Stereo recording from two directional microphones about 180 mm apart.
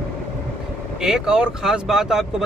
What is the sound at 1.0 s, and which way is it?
Speech, 5° right (ahead or behind).